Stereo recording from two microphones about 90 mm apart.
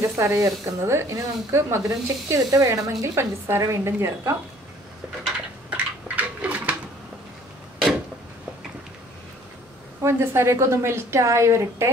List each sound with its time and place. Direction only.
0.0 s speech: 30° right (ahead or behind)
5.2 s bird: 15° right (ahead or behind)
10.0 s speech: 30° right (ahead or behind)